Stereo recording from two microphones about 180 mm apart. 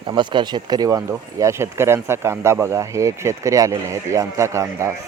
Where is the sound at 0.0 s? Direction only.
25° right (ahead or behind).